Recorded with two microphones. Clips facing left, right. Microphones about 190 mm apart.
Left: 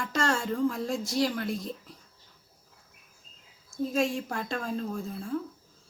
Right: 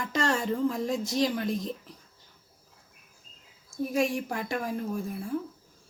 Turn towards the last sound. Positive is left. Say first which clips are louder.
# right 1 dB
turn(degrees=-15)  # may be behind; listen again after turning